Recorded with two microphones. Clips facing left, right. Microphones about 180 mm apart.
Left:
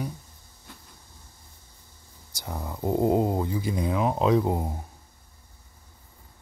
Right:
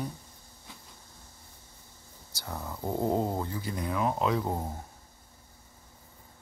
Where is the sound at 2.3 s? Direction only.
15° left (ahead or behind).